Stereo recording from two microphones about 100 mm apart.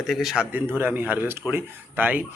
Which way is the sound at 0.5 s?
20° right (ahead or behind).